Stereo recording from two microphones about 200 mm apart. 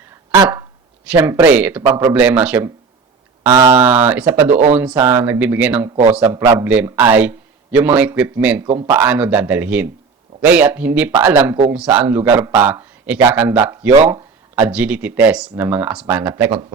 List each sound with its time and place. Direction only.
0.3 s a sound: 20° right (ahead or behind)
1.1 s speech: 15° right (ahead or behind)
3.8 s speech: 10° right (ahead or behind)
6.3 s a man's voice: 20° right (ahead or behind)